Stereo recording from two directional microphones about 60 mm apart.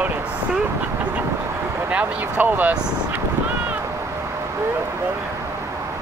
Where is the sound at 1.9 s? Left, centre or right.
Right.